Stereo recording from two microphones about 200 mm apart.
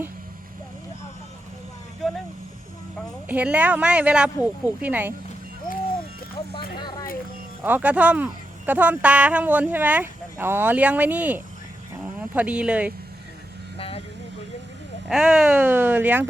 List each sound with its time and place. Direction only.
2.0 s vehicle: centre (ahead or behind)
3.2 s speech: 10° right (ahead or behind)
6.7 s a sound: 20° left (ahead or behind)
7.6 s speech: 10° right (ahead or behind)
13.7 s vehicle: 30° left (ahead or behind)
15.1 s speech: 5° right (ahead or behind)